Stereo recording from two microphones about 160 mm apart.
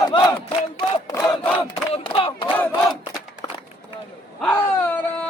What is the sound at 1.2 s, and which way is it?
Battle cry, 5° left (ahead or behind).